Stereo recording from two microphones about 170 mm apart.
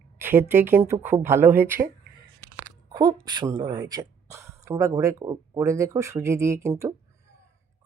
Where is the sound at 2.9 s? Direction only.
25° right (ahead or behind).